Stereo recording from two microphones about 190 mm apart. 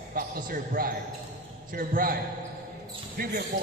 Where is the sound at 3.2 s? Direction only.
55° right (ahead or behind).